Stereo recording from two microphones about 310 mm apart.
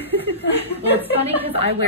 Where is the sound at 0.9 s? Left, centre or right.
Centre.